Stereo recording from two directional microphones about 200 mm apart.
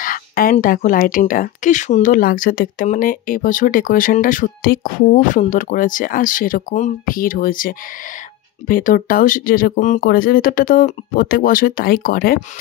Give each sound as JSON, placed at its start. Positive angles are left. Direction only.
{"t": 0.0, "sound": "speech", "side_deg": 45}